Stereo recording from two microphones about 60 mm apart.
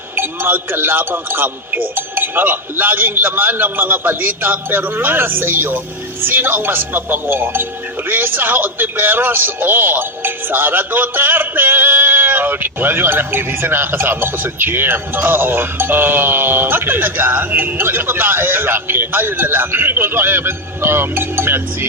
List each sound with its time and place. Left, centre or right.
0.2 s speech: right